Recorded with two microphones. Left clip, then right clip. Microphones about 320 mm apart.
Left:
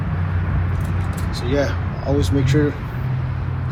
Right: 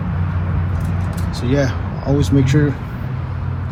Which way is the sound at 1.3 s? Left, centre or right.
Centre.